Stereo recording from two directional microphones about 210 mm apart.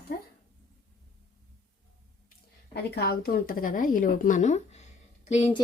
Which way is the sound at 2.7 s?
50° left (ahead or behind).